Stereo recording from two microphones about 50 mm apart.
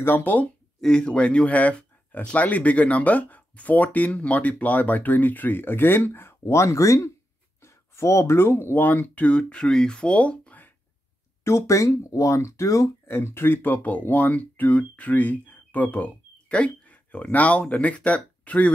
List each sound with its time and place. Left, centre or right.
0.0 s speech: left
0.7 s speech: centre; by 6.3 s left
6.4 s speech: left
8.8 s speech: left
11.4 s speech: left
13.1 s speech: left
13.6 s speech: left